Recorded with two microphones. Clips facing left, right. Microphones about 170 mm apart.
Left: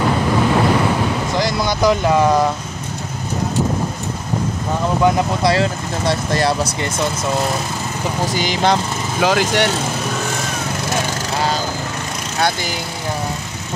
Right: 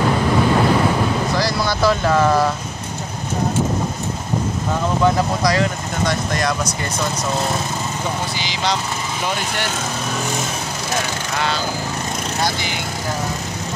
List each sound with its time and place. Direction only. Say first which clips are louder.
1.4 s speech: left 4 dB; 20° left (ahead or behind)
5.0 s speech: left 2 dB; 15° left (ahead or behind)
5.4 s speech: left 2 dB; 30° left (ahead or behind)
8.3 s speech: left 6 dB; 50° left (ahead or behind)
9.2 s speech: left 10 dB; 90° left
11.3 s lawn mower: left 2 dB; 40° left (ahead or behind)